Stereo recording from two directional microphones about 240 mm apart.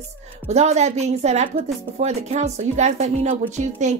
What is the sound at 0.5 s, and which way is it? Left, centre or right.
Speech, right.